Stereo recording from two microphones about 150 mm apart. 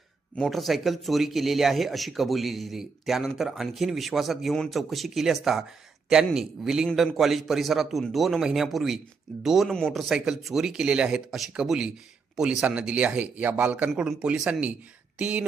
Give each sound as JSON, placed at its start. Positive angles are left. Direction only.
{"t": 0.3, "sound": "speech", "side_deg": 0}